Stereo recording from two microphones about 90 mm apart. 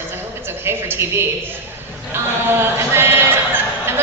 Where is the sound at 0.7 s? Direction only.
25° right (ahead or behind).